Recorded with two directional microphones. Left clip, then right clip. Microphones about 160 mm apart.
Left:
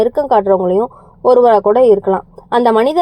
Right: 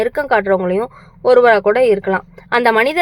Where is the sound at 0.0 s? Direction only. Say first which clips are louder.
Left 3 dB; 30° right (ahead or behind).